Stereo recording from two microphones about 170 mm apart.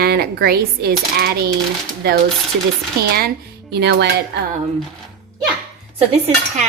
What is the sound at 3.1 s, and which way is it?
Speech, 70° right (ahead or behind).